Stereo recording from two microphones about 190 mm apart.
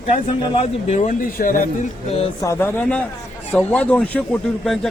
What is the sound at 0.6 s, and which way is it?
Speech, 40° left (ahead or behind).